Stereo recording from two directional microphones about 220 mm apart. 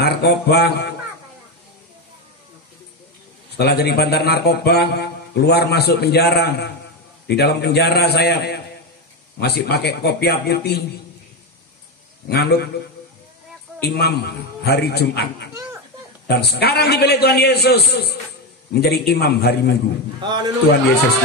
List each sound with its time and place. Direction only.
0.0 s a man's voice: 45° left (ahead or behind)
3.5 s a man's voice: 45° left (ahead or behind)
12.3 s a man's voice: 45° left (ahead or behind)
13.7 s a man's voice: 45° left (ahead or behind)
20.2 s a man's voice: 20° right (ahead or behind)